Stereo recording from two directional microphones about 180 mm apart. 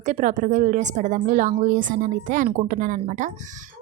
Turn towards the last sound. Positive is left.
turn(degrees=-45)  # may be behind; listen again after turning